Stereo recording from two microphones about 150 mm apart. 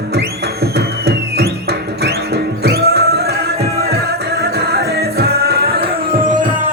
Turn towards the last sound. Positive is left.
turn(degrees=-90)